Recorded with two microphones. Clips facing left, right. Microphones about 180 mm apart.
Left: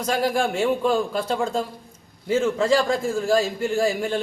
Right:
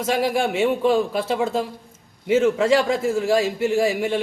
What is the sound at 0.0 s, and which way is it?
A man's voice, 5° right (ahead or behind).